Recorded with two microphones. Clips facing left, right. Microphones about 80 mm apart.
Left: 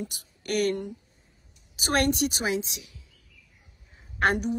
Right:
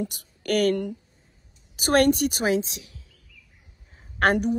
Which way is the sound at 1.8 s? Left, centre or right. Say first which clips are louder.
Right 5 dB; right.